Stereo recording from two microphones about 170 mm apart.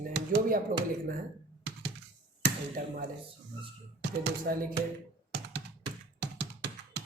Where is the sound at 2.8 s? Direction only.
55° right (ahead or behind).